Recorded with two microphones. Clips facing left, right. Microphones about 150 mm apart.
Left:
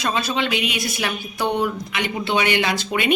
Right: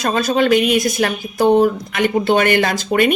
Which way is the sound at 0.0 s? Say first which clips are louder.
Right 7 dB; 45° right (ahead or behind).